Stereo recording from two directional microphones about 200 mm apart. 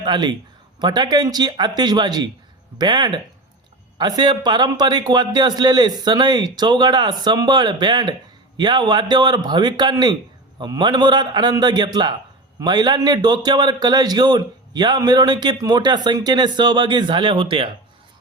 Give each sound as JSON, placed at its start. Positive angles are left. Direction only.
{"t": 0.0, "sound": "a man's voice", "side_deg": -20}